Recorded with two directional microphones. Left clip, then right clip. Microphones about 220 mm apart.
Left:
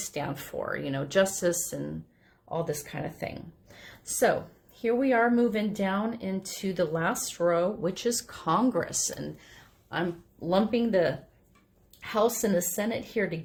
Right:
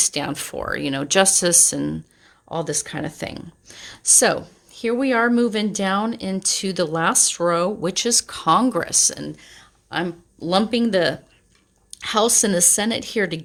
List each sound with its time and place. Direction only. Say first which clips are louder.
0.1 s speech: right 8 dB; 40° right (ahead or behind)